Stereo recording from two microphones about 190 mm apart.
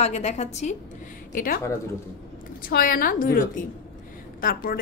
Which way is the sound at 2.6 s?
50° left (ahead or behind).